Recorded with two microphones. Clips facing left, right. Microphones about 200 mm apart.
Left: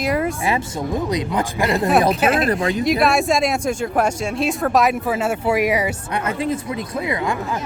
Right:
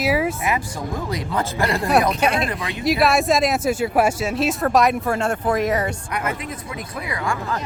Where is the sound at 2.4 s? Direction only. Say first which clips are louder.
Left 7 dB; 45° left (ahead or behind).